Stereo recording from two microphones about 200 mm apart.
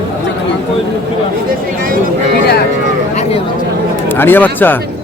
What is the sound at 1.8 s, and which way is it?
Speech, 45° right (ahead or behind).